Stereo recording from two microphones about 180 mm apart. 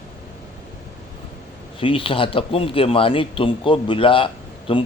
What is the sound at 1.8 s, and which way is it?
Speech, 30° left (ahead or behind).